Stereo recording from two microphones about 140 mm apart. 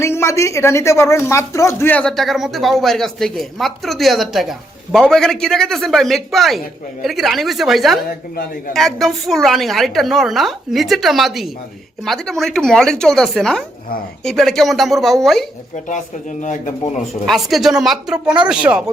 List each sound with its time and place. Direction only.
0.0 s speech: 20° left (ahead or behind); by 15.4 s centre (ahead or behind)
15.7 s speech: 60° left (ahead or behind)
17.2 s speech: centre (ahead or behind)